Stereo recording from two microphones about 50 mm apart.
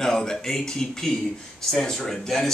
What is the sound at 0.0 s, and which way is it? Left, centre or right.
Speech, centre.